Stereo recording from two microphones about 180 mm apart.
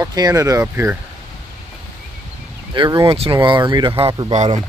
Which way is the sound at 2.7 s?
25° right (ahead or behind).